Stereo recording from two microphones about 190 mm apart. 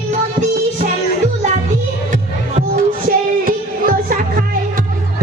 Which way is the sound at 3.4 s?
50° right (ahead or behind).